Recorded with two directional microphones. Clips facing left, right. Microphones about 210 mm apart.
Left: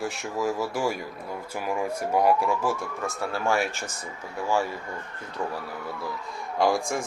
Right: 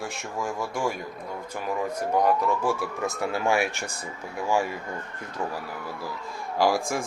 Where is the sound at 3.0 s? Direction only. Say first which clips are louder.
Right 2 dB; 15° right (ahead or behind).